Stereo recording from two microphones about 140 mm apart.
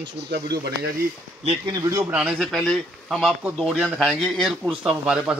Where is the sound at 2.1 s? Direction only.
5° right (ahead or behind).